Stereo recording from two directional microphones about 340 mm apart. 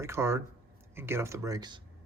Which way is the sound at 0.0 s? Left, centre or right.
Centre.